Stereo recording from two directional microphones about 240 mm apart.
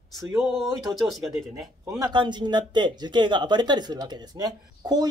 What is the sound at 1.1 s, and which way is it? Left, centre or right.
Speech, centre.